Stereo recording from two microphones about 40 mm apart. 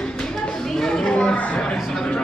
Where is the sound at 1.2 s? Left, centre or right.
Left.